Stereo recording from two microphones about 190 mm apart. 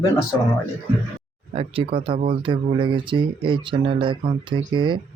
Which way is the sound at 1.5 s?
30° right (ahead or behind).